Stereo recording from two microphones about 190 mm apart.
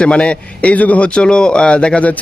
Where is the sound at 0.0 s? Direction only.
5° left (ahead or behind).